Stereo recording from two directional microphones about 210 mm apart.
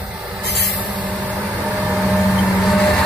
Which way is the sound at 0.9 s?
5° right (ahead or behind).